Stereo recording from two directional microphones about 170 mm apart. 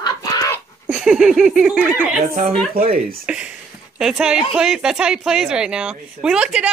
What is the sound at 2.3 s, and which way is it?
Speech, 45° right (ahead or behind).